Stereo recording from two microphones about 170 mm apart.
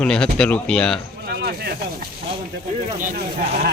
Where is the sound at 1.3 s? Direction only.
65° right (ahead or behind).